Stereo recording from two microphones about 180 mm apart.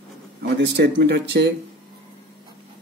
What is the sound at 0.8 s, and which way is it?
Speech, 70° right (ahead or behind).